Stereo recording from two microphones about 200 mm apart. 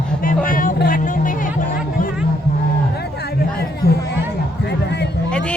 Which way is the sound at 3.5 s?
55° left (ahead or behind).